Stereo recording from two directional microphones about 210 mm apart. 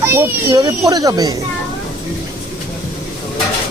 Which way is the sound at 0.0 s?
10° right (ahead or behind).